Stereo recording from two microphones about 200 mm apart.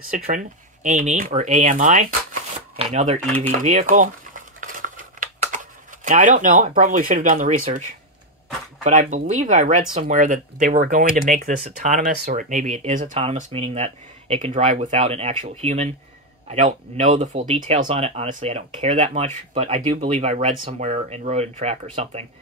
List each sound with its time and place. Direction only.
0.8 s speech: 35° right (ahead or behind)
2.8 s a sound: 30° right (ahead or behind)
6.0 s speech: 40° right (ahead or behind)
8.8 s speech: 40° right (ahead or behind)